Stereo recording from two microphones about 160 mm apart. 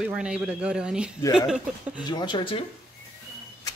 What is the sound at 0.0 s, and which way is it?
Speech, 5° right (ahead or behind).